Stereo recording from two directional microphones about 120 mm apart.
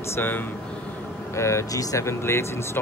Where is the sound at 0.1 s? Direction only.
15° left (ahead or behind).